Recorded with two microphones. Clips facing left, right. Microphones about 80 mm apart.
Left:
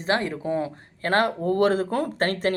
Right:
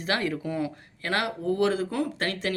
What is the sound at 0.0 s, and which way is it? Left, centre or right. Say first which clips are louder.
Speech: left 3 dB; left.